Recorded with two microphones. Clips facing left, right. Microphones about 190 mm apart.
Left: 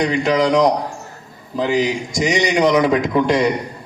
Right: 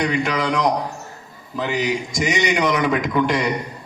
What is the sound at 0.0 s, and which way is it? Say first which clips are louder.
Speech: left 2 dB; 25° left (ahead or behind).